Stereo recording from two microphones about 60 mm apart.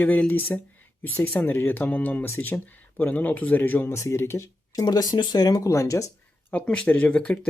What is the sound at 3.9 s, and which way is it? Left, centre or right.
Speech, left.